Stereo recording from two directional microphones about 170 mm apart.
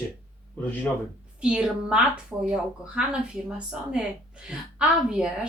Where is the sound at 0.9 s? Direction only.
15° left (ahead or behind).